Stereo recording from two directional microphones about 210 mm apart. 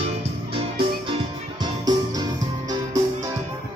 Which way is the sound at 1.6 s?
20° right (ahead or behind).